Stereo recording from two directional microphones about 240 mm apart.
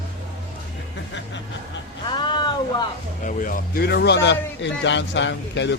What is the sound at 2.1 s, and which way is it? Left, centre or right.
Speech, centre.